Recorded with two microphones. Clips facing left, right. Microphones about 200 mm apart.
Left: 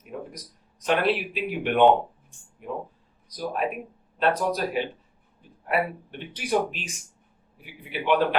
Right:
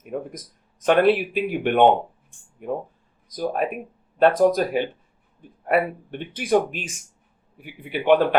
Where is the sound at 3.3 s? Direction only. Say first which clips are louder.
Right 4 dB; 45° right (ahead or behind).